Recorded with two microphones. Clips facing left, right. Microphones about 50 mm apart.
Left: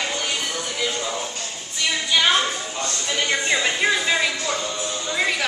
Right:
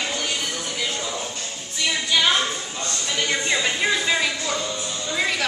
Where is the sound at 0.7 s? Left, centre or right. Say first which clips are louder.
Left 3 dB; centre.